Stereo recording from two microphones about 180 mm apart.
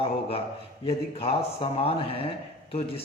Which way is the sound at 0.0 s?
30° left (ahead or behind).